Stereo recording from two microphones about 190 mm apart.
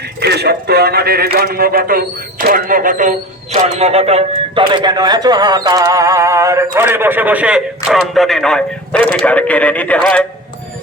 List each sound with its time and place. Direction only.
0.2 s a man's voice: 60° right (ahead or behind); by 10.2 s 5° left (ahead or behind)